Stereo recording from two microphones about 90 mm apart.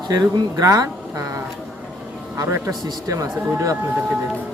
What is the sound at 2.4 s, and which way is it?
Speech, 30° right (ahead or behind).